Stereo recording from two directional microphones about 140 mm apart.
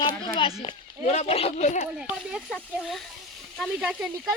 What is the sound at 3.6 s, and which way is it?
Speech, 5° right (ahead or behind).